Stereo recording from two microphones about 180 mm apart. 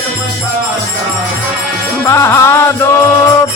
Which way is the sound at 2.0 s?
15° left (ahead or behind).